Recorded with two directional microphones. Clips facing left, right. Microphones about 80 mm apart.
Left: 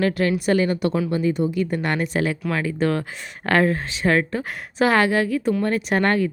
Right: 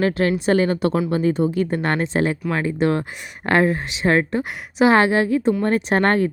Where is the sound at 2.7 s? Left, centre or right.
Right.